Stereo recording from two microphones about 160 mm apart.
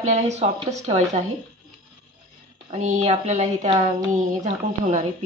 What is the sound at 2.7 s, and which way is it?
Speech, 45° right (ahead or behind).